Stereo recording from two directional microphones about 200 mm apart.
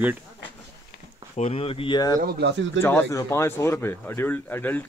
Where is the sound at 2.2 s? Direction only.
55° right (ahead or behind).